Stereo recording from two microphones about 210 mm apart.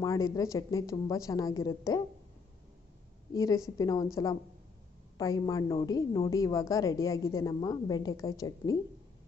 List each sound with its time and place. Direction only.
0.0 s a woman's voice: 15° left (ahead or behind)
3.3 s a woman's voice: 15° left (ahead or behind)